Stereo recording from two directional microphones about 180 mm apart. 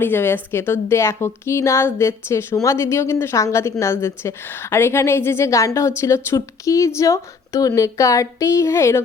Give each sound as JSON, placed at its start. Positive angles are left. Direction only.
{"t": 0.0, "sound": "a woman's voice", "side_deg": 10}